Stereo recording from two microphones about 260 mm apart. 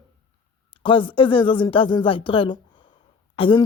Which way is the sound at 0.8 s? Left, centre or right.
Centre.